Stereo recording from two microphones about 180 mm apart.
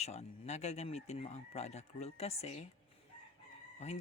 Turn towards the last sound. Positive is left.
turn(degrees=35)  # may be behind; listen again after turning